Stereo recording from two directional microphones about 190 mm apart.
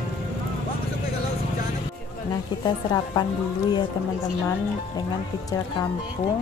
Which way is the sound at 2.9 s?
20° left (ahead or behind).